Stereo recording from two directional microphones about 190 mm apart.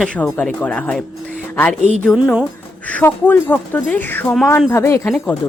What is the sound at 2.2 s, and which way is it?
Speech, 5° right (ahead or behind).